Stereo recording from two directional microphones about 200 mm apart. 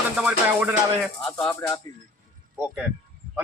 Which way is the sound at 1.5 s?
15° left (ahead or behind).